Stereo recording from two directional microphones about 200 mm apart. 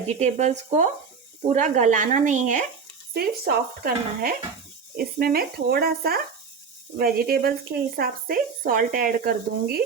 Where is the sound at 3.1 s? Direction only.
50° right (ahead or behind).